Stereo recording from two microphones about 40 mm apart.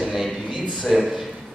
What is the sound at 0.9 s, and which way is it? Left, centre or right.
Speech, centre.